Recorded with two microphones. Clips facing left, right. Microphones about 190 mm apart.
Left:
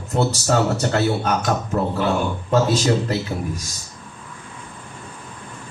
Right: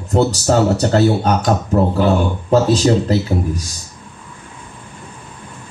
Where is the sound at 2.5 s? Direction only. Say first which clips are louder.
Right 5 dB; 35° right (ahead or behind).